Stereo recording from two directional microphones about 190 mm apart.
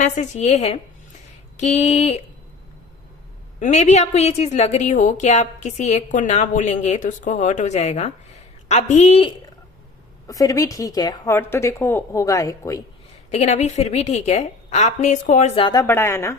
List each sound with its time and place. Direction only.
0.0 s a woman's voice: 35° left (ahead or behind)
3.6 s a woman's voice: 40° left (ahead or behind)
10.2 s a woman's voice: 15° left (ahead or behind)
13.3 s a woman's voice: 35° left (ahead or behind); by 16.4 s 15° left (ahead or behind)